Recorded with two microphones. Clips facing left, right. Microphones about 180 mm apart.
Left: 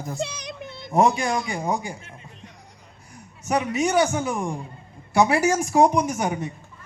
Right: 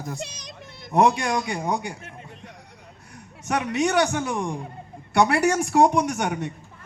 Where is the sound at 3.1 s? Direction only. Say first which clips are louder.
Left 2 dB; centre (ahead or behind).